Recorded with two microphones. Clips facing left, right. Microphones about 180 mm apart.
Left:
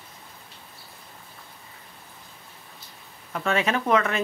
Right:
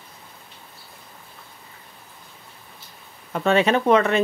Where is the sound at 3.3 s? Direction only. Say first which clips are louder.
Right 6 dB; 30° right (ahead or behind).